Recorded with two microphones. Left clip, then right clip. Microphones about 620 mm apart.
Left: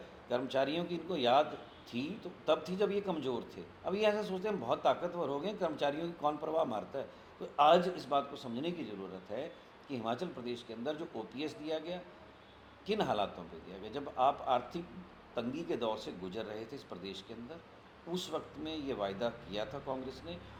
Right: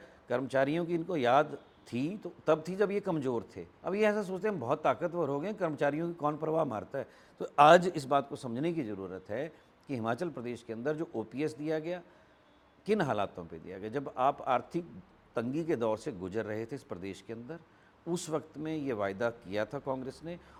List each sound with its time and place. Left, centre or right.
0.3 s a man's voice: right
7.4 s a man's voice: right